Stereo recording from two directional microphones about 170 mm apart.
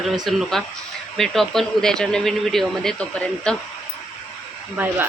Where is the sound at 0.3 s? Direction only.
Centre (ahead or behind).